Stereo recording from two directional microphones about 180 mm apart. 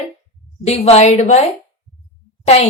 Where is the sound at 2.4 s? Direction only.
35° left (ahead or behind).